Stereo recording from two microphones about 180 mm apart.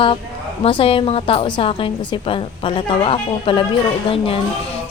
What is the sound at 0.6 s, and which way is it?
A woman's voice, 30° left (ahead or behind).